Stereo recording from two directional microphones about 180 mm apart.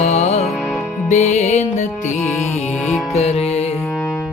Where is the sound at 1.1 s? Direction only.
40° left (ahead or behind).